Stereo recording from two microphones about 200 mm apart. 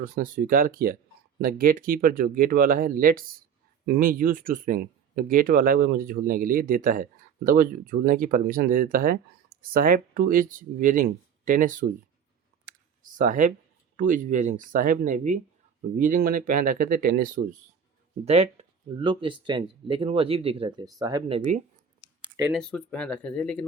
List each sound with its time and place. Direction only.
0.0 s speech: 45° right (ahead or behind)
13.1 s speech: 40° right (ahead or behind)
18.9 s speech: 25° right (ahead or behind)
22.5 s speech: 5° left (ahead or behind)